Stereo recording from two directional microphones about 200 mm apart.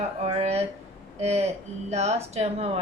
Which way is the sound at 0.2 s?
30° right (ahead or behind).